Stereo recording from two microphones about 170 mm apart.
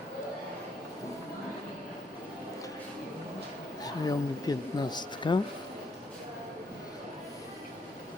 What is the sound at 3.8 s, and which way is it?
Speech, 20° left (ahead or behind).